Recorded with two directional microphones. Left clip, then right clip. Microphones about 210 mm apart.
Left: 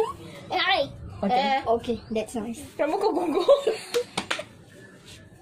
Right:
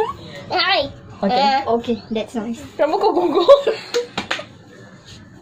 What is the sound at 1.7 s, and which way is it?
Speech, 20° left (ahead or behind).